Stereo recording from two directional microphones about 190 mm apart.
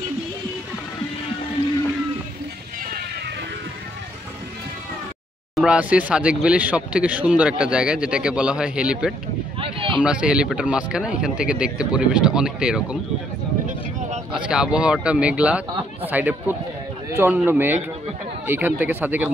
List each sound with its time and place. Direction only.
5.6 s speech: 5° right (ahead or behind)
9.6 s a sound: 30° right (ahead or behind)
9.9 s speech: 5° right (ahead or behind)
14.5 s speech: 5° right (ahead or behind)